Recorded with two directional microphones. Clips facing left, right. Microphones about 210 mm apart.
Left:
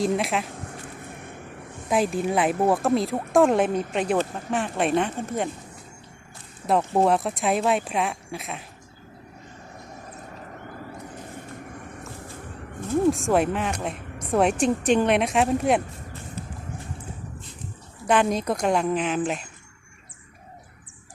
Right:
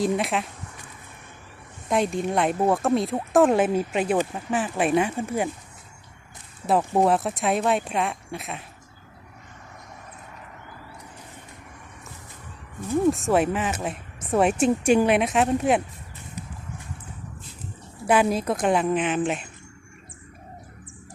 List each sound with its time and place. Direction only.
0.0 s speech: centre (ahead or behind)
0.5 s vehicle: 50° left (ahead or behind)
1.9 s speech: centre (ahead or behind)
6.7 s speech: 5° right (ahead or behind)
13.1 s speech: centre (ahead or behind)
18.0 s speech: 5° right (ahead or behind)